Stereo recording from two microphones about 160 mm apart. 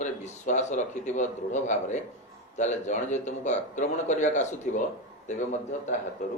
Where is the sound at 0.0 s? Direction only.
45° left (ahead or behind).